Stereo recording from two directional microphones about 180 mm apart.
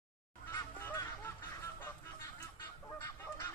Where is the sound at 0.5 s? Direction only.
15° left (ahead or behind).